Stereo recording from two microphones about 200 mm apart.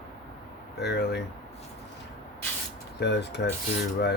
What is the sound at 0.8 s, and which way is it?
Speech, 55° left (ahead or behind).